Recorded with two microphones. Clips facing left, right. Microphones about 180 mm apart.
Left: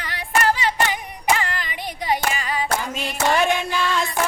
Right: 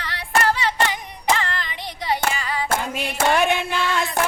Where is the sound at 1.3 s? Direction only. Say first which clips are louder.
Even; 10° left (ahead or behind).